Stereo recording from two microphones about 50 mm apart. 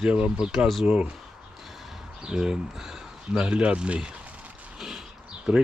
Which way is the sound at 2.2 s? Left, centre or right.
Centre.